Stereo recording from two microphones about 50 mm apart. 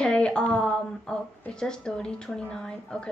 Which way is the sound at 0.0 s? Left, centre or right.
Centre.